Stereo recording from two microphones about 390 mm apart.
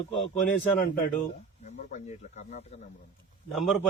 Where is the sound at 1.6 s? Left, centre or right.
Centre.